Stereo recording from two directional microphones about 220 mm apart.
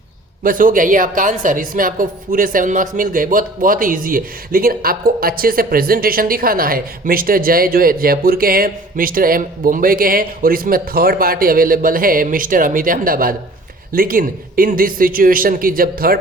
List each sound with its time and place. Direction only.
0.4 s a woman's voice: 40° right (ahead or behind)